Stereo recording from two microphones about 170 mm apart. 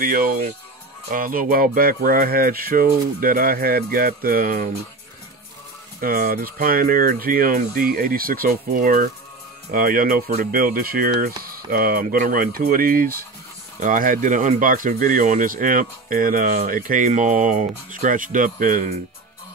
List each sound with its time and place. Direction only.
0.0 s speech: 55° right (ahead or behind)
5.9 s speech: 55° right (ahead or behind)